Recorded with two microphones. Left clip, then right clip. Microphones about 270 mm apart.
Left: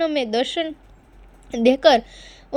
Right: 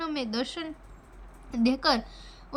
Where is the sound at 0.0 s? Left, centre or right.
Centre.